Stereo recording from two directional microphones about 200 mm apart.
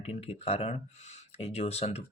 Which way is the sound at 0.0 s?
30° left (ahead or behind).